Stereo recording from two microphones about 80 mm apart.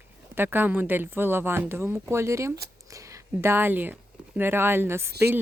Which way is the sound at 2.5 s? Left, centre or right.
Right.